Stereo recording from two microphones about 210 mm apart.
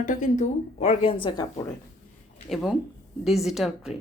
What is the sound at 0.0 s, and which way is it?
A woman's voice, 35° left (ahead or behind).